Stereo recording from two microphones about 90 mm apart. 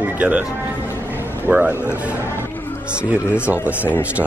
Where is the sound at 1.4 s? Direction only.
25° right (ahead or behind).